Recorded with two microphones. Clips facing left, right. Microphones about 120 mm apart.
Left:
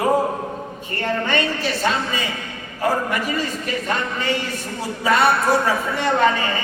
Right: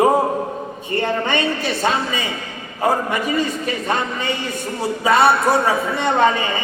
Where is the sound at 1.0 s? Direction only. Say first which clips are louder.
Right 1 dB; 20° right (ahead or behind).